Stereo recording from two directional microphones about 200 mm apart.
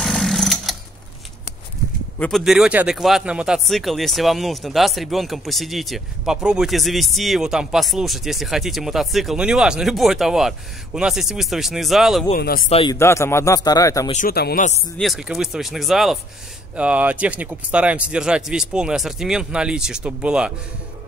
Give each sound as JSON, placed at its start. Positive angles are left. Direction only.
{"t": 0.0, "sound": "sewing machine", "side_deg": 0}
{"t": 2.1, "sound": "speech", "side_deg": 5}
{"t": 12.4, "sound": "speech", "side_deg": 50}
{"t": 12.6, "sound": "a man's voice", "side_deg": 30}
{"t": 12.9, "sound": "a man's voice", "side_deg": 15}
{"t": 14.1, "sound": "speech", "side_deg": 50}
{"t": 15.0, "sound": "speech", "side_deg": 0}